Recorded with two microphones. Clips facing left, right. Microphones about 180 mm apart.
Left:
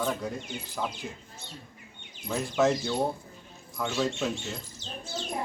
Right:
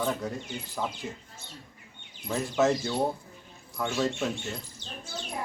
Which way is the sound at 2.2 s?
Centre (ahead or behind).